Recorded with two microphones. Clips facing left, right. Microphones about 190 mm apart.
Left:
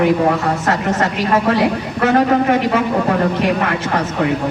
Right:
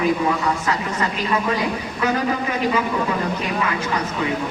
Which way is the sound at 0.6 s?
80° left.